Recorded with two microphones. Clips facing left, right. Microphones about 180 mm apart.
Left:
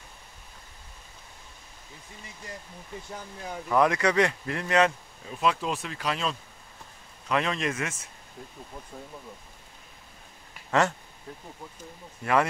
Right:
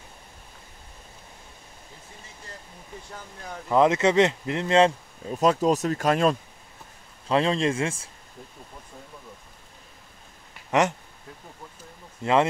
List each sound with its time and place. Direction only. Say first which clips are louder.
3.6 s speech: right 4 dB; 20° right (ahead or behind)
5.3 s speech: right 6 dB; 40° right (ahead or behind)
7.2 s speech: right 5 dB; 30° right (ahead or behind)
10.7 s speech: right 2 dB; 20° right (ahead or behind)
12.2 s speech: right 3 dB; 25° right (ahead or behind)